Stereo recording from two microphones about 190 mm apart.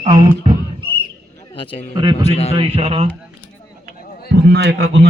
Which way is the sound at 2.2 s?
35° left (ahead or behind).